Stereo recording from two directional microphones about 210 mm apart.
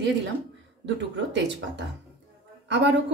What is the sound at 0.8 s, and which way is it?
A woman's voice, 60° right (ahead or behind).